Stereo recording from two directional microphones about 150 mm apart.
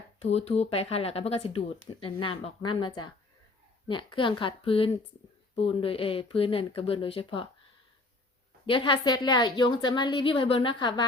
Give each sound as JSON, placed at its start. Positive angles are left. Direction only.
{"t": 0.2, "sound": "a woman's voice", "side_deg": 45}
{"t": 8.6, "sound": "a woman's voice", "side_deg": 35}